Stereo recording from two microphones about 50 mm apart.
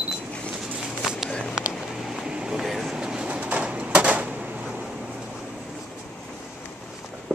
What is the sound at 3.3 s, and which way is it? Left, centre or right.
Bird, right.